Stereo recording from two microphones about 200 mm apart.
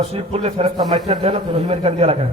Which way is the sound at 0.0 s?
30° right (ahead or behind).